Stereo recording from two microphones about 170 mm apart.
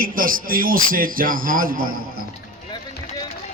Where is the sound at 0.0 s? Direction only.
55° right (ahead or behind).